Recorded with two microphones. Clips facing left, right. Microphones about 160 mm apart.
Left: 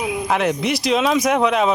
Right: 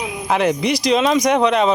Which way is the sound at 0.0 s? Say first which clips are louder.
Right 1 dB; centre (ahead or behind).